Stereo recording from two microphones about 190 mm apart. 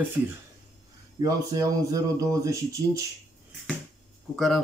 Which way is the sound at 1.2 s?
20° right (ahead or behind).